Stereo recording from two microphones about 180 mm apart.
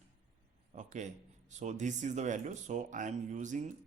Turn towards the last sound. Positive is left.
turn(degrees=-45)  # may be behind; listen again after turning